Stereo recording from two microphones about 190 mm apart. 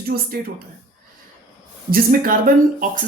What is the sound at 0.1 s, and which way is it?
Speech, 55° right (ahead or behind).